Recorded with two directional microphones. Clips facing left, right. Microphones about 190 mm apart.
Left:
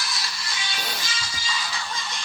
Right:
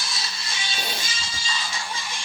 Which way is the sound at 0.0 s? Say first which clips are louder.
Left 1 dB; 25° right (ahead or behind).